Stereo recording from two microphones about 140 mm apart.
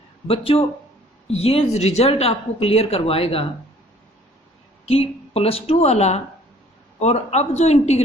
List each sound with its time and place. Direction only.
0.3 s a woman's voice: 45° left (ahead or behind)
4.9 s a woman's voice: 45° left (ahead or behind)